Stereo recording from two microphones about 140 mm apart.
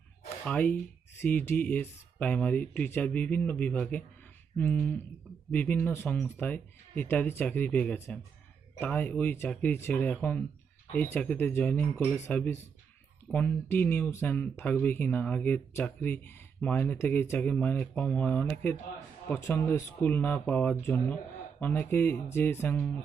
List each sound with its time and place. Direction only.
0.4 s speech: 10° left (ahead or behind)
13.2 s speech: 10° left (ahead or behind)